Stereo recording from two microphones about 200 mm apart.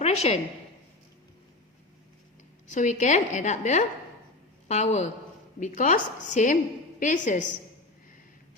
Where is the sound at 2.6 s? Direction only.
35° left (ahead or behind).